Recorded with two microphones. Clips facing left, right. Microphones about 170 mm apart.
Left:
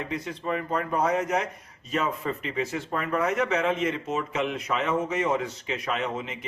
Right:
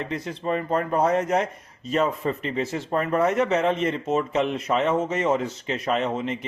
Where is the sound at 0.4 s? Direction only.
30° right (ahead or behind).